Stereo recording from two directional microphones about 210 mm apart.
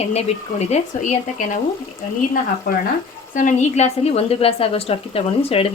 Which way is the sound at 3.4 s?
35° left (ahead or behind).